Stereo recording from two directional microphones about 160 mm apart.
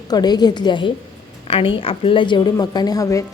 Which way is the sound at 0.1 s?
25° left (ahead or behind).